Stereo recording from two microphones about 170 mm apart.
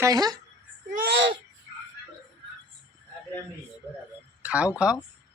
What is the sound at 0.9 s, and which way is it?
Speech, 80° right.